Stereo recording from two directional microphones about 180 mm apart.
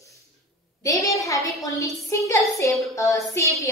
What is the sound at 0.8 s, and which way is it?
A woman's voice, 20° left (ahead or behind).